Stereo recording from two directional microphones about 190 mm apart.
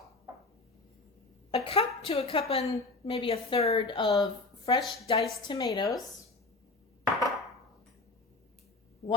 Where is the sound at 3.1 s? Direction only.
25° left (ahead or behind).